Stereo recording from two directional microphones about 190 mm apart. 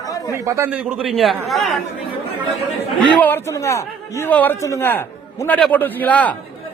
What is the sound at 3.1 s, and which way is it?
A man's voice, 10° left (ahead or behind).